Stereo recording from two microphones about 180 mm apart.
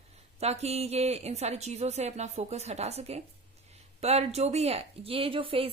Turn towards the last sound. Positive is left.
turn(degrees=-30)  # may be behind; listen again after turning